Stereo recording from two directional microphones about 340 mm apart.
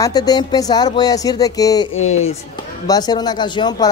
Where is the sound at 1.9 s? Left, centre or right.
Left.